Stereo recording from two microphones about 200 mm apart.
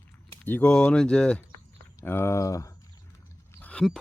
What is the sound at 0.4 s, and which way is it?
Speech, 5° left (ahead or behind).